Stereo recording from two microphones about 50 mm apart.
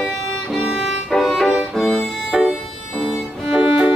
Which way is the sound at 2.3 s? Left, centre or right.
Centre.